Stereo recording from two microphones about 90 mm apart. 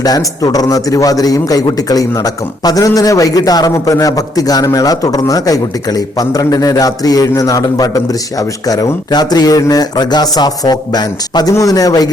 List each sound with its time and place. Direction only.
0.0 s a man's voice: 45° left (ahead or behind)